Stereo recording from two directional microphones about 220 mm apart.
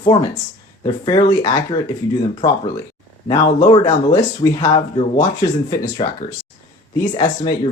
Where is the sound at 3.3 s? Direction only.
20° left (ahead or behind).